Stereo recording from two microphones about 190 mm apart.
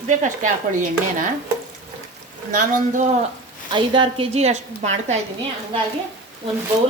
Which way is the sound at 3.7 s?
25° right (ahead or behind).